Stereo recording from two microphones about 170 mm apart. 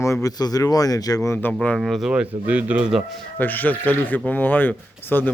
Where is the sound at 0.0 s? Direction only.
20° left (ahead or behind); by 3.0 s 5° right (ahead or behind).